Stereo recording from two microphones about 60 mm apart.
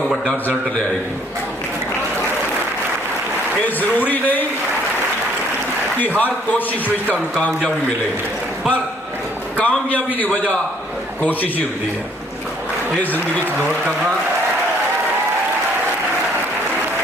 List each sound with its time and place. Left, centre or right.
3.6 s a man's voice: left
6.0 s a man's voice: left
9.6 s a man's voice: left
13.0 s a man's voice: left